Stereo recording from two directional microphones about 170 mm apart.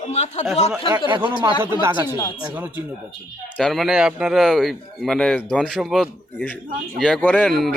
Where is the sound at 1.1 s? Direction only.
30° right (ahead or behind).